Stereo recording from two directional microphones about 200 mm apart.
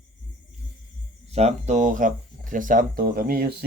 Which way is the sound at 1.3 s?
30° right (ahead or behind).